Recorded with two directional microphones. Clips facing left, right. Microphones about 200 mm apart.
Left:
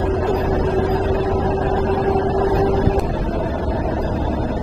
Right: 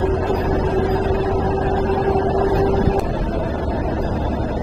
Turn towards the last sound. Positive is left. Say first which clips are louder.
# even
turn(degrees=25)  # may be behind; listen again after turning